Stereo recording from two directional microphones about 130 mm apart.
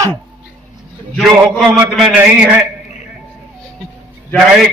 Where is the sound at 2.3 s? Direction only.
10° right (ahead or behind).